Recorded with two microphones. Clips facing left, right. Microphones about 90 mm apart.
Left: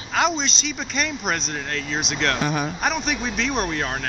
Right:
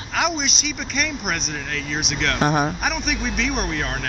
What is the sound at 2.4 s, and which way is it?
Speech, 40° right (ahead or behind).